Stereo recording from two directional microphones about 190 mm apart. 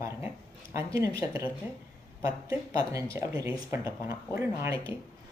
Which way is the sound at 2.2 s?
15° right (ahead or behind).